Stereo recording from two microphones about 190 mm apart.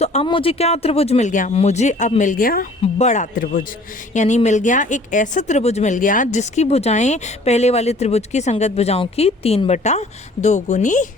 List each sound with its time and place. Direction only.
0.0 s speech: 30° left (ahead or behind); by 2.6 s 50° left (ahead or behind)
2.8 s speech: 40° left (ahead or behind)